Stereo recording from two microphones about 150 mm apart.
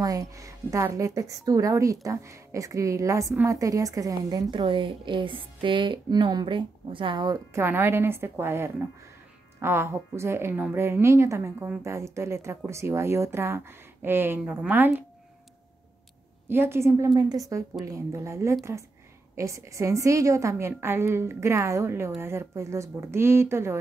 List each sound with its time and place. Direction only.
0.0 s a woman's voice: 25° right (ahead or behind)
7.6 s a woman's voice: 15° right (ahead or behind)
16.4 s a woman's voice: 15° right (ahead or behind)